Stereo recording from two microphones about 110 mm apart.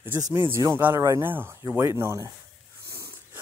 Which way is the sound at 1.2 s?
20° right (ahead or behind).